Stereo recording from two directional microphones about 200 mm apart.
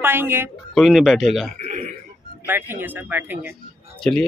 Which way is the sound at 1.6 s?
35° right (ahead or behind).